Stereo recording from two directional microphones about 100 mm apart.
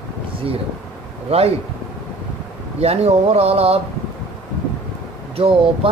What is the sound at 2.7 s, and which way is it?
Speech, 90° right.